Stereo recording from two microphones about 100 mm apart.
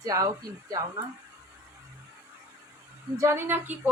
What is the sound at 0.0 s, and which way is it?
Speech, 35° right (ahead or behind).